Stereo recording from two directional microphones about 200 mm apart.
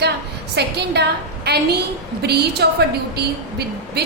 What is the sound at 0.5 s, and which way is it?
A woman's voice, 55° right (ahead or behind).